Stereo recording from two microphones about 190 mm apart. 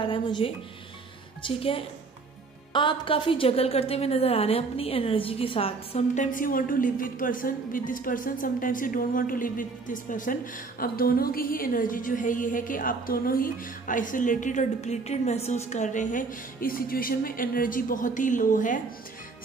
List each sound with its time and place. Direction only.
0.0 s a woman's voice: 25° left (ahead or behind); by 18.8 s 45° left (ahead or behind)